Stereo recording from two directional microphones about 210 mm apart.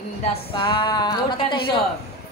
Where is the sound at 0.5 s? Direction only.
20° left (ahead or behind).